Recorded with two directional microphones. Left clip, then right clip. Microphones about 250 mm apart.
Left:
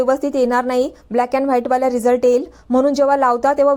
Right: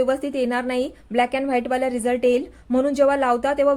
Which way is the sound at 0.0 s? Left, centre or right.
Centre.